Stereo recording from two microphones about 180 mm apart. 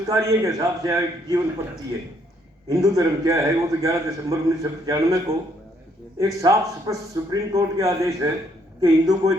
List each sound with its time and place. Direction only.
0.0 s a man's voice: 20° right (ahead or behind)
2.6 s a man's voice: 20° right (ahead or behind)